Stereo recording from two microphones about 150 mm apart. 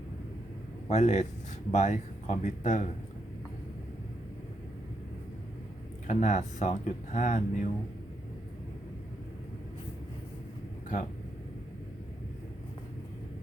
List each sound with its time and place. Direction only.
0.9 s speech: 50° left (ahead or behind)
6.1 s speech: 55° left (ahead or behind)